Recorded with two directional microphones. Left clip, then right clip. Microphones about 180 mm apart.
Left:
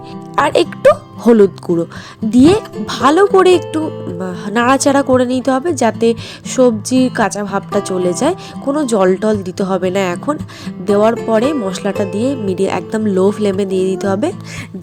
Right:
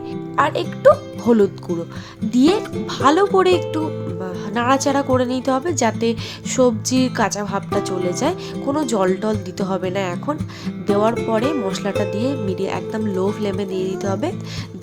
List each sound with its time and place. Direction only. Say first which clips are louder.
0.3 s speech: left 6 dB; 40° left (ahead or behind)